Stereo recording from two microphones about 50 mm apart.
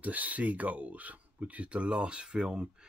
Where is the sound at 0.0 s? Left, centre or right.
Right.